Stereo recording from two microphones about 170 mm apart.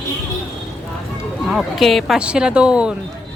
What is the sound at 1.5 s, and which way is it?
Speech, centre (ahead or behind).